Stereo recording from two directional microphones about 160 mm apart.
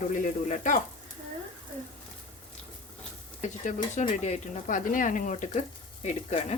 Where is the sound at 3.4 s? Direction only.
50° left (ahead or behind).